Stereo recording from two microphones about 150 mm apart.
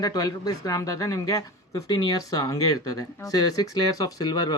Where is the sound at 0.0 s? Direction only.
25° left (ahead or behind).